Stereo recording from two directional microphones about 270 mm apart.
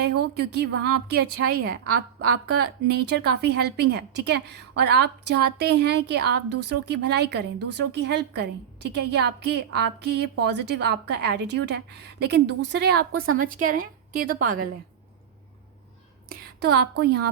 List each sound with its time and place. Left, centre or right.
0.0 s a woman's voice: right
16.3 s a sound: right
17.0 s a woman's voice: right